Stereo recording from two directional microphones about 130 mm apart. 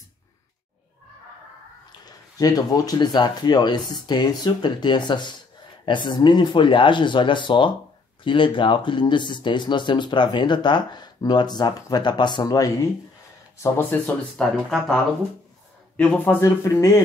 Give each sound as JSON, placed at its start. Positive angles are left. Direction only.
{"t": 1.9, "sound": "speech", "side_deg": 30}
{"t": 13.6, "sound": "speech", "side_deg": 15}
{"t": 16.0, "sound": "speech", "side_deg": 10}
{"t": 16.3, "sound": "speech", "side_deg": 20}